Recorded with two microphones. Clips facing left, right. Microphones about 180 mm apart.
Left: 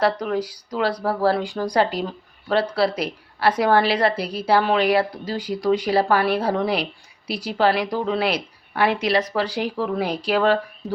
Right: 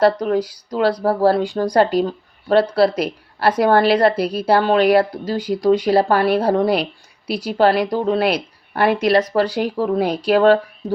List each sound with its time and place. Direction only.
0.0 s speech: 45° right (ahead or behind)